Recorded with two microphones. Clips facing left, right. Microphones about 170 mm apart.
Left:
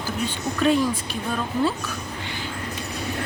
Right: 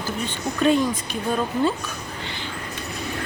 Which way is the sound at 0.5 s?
Centre (ahead or behind).